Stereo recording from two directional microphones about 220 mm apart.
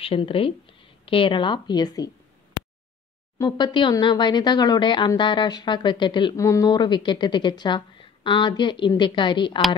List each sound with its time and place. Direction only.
0.0 s speech: 25° left (ahead or behind)
3.3 s speech: 20° left (ahead or behind)